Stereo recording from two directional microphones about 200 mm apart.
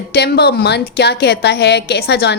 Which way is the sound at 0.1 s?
55° left (ahead or behind).